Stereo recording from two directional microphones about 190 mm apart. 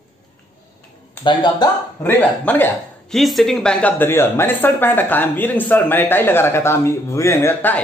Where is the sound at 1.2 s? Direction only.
25° left (ahead or behind).